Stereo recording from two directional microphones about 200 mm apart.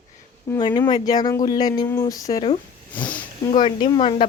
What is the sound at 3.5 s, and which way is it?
Speech, 25° left (ahead or behind).